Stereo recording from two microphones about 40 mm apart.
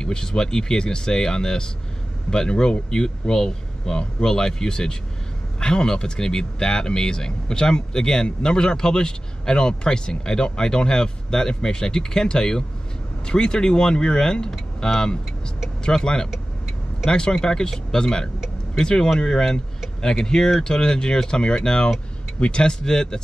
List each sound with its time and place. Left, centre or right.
0.0 s speech: centre